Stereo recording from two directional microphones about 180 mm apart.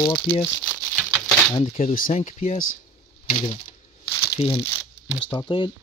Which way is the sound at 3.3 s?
45° left (ahead or behind).